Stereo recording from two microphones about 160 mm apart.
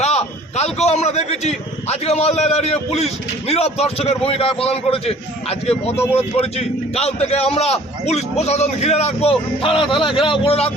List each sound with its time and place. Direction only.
0.0 s a man's voice: 45° left (ahead or behind)